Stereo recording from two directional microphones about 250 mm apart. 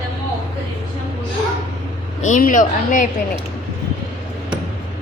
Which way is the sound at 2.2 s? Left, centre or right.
Left.